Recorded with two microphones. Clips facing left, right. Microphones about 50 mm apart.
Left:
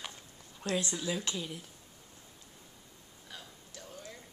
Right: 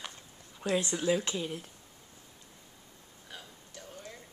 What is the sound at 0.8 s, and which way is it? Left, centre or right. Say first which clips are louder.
Speech: right 6 dB; right.